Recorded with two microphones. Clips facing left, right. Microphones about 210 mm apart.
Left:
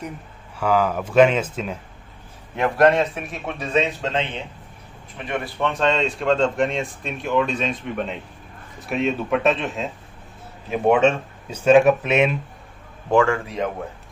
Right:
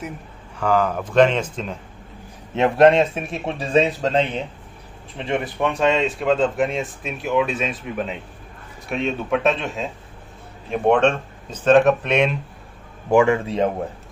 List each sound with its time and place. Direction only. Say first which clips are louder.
0.6 s speech: even; 5° left (ahead or behind)
2.5 s speech: right 3 dB; 25° right (ahead or behind)
5.1 s speech: right 4 dB; 25° right (ahead or behind)
5.6 s speech: right 1 dB; 10° right (ahead or behind); by 12.4 s 5° left (ahead or behind)
13.1 s speech: right 2 dB; 15° right (ahead or behind)